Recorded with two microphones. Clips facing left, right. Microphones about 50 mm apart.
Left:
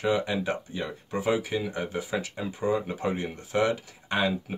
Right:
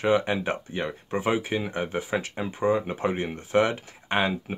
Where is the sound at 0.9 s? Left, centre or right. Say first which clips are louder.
Even; right.